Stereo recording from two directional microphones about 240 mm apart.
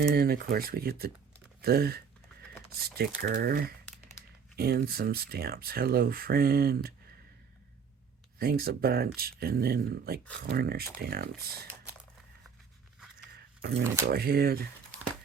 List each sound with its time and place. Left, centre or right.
0.1 s speech: right
8.4 s speech: right
13.3 s a sound: right
14.1 s speech: right